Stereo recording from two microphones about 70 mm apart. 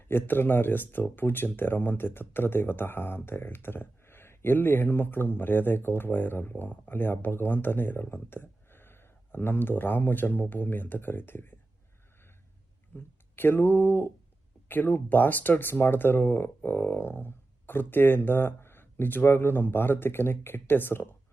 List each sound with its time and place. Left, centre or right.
0.1 s speech: left
12.9 s speech: left